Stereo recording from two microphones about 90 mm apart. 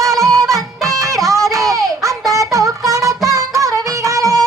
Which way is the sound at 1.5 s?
35° right (ahead or behind).